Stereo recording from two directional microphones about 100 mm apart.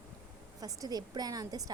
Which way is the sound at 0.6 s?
40° right (ahead or behind).